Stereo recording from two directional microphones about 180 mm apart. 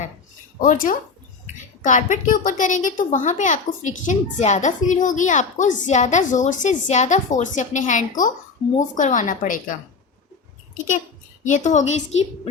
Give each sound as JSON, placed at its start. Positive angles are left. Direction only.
{"t": 0.6, "sound": "a woman's voice", "side_deg": 45}
{"t": 11.4, "sound": "a woman's voice", "side_deg": 45}